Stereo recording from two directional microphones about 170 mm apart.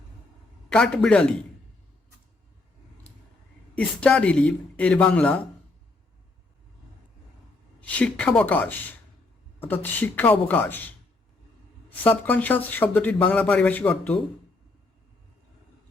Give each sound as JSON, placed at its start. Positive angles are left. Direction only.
{"t": 0.7, "sound": "a man's voice", "side_deg": 5}
{"t": 3.8, "sound": "speech", "side_deg": 5}
{"t": 7.8, "sound": "speech", "side_deg": 10}